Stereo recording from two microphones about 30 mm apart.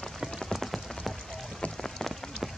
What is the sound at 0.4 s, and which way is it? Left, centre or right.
Rain on surface, centre.